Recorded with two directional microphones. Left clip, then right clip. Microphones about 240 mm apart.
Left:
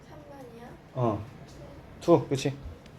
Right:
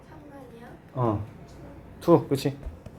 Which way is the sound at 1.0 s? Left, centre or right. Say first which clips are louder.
Right 2 dB; right.